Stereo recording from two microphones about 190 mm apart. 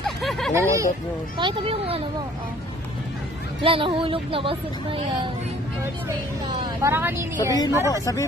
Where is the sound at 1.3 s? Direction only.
25° right (ahead or behind).